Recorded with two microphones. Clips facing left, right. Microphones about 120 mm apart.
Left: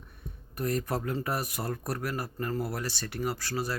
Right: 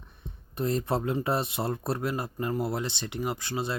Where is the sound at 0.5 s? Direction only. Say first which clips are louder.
Right 3 dB; 25° right (ahead or behind).